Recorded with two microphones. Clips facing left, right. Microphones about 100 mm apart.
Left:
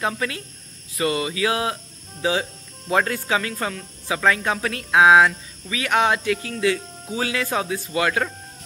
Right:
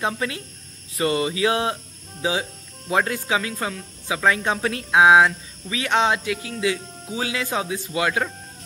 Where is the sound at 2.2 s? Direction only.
20° right (ahead or behind).